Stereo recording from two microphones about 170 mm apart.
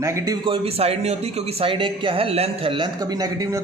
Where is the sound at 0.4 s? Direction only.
35° right (ahead or behind).